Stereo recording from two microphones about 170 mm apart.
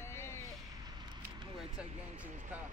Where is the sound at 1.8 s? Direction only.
5° right (ahead or behind).